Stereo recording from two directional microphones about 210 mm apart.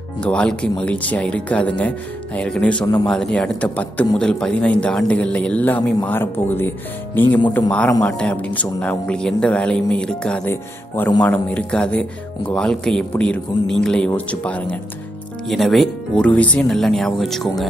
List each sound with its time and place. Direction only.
0.2 s speech: 5° left (ahead or behind)
2.8 s speech: 15° left (ahead or behind)
3.1 s speech: 5° left (ahead or behind)